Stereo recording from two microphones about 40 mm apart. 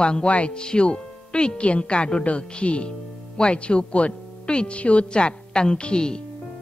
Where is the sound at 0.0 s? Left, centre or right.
Left.